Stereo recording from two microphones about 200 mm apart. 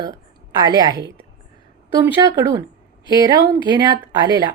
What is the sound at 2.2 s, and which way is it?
A woman's voice, 15° right (ahead or behind).